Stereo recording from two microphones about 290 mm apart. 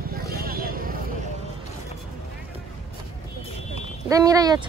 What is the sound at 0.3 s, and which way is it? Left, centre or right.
Vehicle, right.